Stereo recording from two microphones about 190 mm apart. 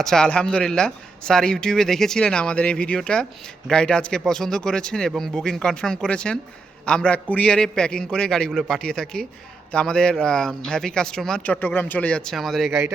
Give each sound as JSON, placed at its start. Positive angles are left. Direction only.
{"t": 0.0, "sound": "a man's voice", "side_deg": 5}